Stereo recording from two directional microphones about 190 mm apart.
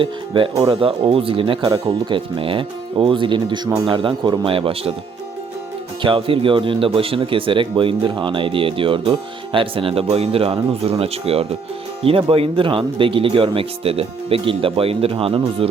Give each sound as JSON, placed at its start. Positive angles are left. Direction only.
{"t": 0.0, "sound": "speech", "side_deg": -25}
{"t": 6.0, "sound": "speech", "side_deg": -25}